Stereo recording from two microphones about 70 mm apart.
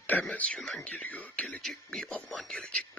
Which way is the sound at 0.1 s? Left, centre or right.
Left.